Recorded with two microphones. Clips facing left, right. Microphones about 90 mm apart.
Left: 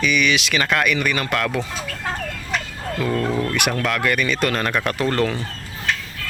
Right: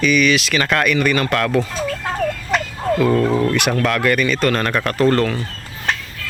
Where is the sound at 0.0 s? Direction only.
15° left (ahead or behind).